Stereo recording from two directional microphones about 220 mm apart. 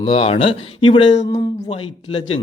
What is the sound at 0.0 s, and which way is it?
Speech, 25° left (ahead or behind).